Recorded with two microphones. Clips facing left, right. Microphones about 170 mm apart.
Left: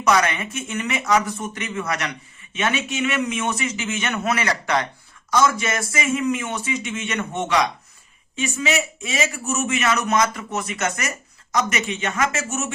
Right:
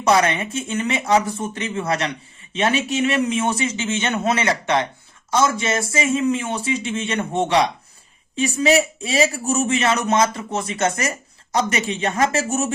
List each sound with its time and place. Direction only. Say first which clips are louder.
0.0 s a man's voice: right 2 dB; 30° right (ahead or behind)